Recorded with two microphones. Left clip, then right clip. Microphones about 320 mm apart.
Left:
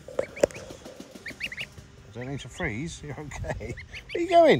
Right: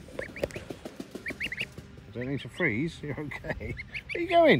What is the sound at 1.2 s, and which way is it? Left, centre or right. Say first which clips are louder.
Fowl: right 1 dB; left.